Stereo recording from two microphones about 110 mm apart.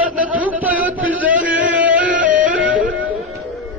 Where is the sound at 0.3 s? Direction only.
10° right (ahead or behind).